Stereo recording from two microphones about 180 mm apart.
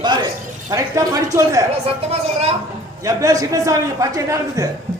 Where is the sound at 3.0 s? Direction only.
20° right (ahead or behind).